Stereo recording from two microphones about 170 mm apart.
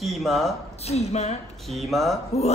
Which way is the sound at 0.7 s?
40° left (ahead or behind).